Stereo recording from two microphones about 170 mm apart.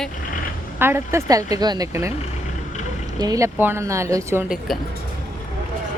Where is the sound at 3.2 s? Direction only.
20° right (ahead or behind).